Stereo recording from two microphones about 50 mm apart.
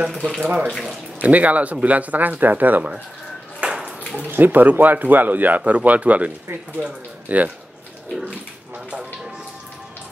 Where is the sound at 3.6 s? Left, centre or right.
Right.